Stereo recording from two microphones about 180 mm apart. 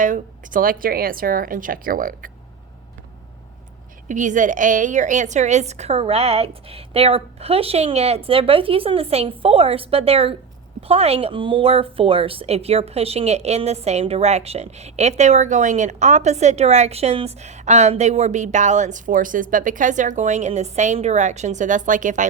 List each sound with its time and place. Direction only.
0.0 s a woman's voice: 45° right (ahead or behind)
4.1 s speech: 45° right (ahead or behind)